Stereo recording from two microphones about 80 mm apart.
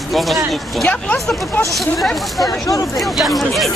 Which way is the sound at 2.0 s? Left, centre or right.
Centre.